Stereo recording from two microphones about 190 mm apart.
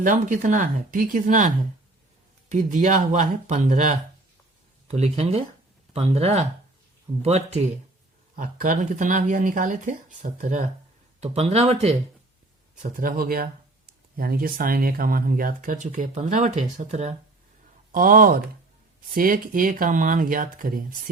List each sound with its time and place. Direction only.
0.0 s speech: 45° right (ahead or behind)
8.4 s speech: 45° right (ahead or behind)
12.7 s speech: 45° right (ahead or behind)